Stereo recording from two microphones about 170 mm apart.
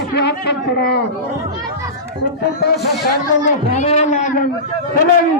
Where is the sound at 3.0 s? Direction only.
45° left (ahead or behind).